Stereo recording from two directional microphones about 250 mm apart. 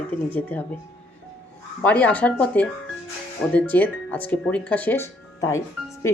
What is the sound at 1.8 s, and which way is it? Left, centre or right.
Speech, centre.